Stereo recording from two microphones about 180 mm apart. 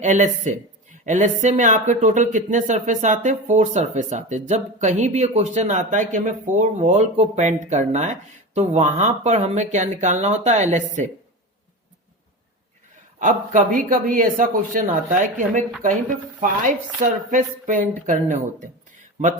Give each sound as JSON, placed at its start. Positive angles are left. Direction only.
{"t": 0.0, "sound": "speech", "side_deg": -45}
{"t": 13.1, "sound": "speech", "side_deg": -45}